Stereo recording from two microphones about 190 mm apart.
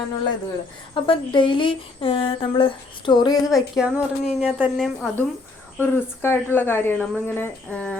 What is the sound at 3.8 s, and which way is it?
Speech, centre (ahead or behind).